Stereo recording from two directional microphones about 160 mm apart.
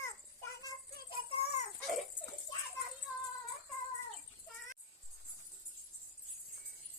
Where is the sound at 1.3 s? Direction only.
35° left (ahead or behind).